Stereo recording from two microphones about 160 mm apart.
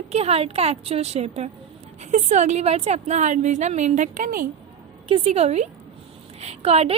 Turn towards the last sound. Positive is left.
turn(degrees=-40)  # may be behind; listen again after turning